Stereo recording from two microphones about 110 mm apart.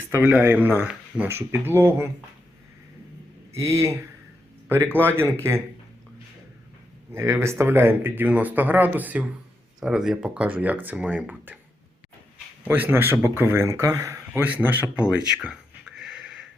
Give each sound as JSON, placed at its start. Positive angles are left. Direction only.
{"t": 0.4, "sound": "speech", "side_deg": -20}
{"t": 3.5, "sound": "speech", "side_deg": -25}
{"t": 7.1, "sound": "speech", "side_deg": -25}
{"t": 12.6, "sound": "speech", "side_deg": -15}
{"t": 14.3, "sound": "speech", "side_deg": -15}
{"t": 16.0, "sound": "a sound", "side_deg": -5}